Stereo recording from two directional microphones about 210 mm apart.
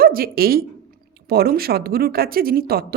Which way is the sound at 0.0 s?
45° right (ahead or behind).